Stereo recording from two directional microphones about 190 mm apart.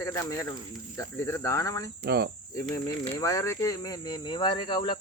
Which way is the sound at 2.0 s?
55° right (ahead or behind).